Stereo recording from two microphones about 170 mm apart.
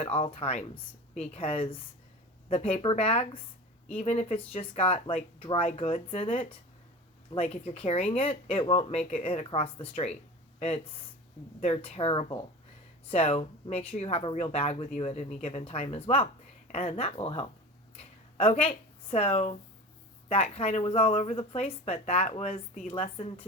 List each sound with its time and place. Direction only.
0.0 s speech: 35° left (ahead or behind)
11.6 s speech: 35° left (ahead or behind)
17.9 s a sound: 40° left (ahead or behind)
20.2 s speech: 40° left (ahead or behind)